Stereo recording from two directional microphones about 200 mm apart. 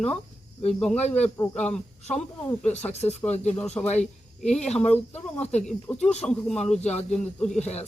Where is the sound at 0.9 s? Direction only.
35° left (ahead or behind).